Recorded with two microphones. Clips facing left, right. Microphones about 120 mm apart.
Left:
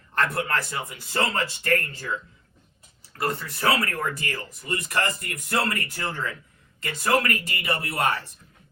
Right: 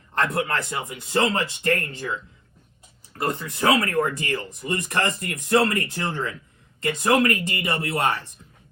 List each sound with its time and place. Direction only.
0.1 s speech: 20° right (ahead or behind)
3.1 s speech: 20° right (ahead or behind)